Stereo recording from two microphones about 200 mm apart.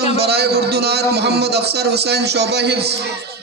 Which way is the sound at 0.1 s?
55° right (ahead or behind).